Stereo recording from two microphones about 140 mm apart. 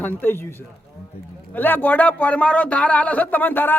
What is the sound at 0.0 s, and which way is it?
Speech, 15° left (ahead or behind).